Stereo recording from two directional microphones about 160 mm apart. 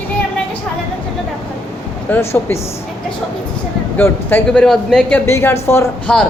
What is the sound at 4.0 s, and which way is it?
A man's voice, 10° left (ahead or behind).